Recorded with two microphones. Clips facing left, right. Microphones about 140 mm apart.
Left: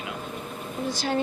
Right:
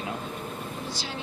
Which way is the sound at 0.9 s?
50° left (ahead or behind).